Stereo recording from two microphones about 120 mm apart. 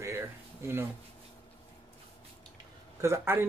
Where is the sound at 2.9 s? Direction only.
25° right (ahead or behind).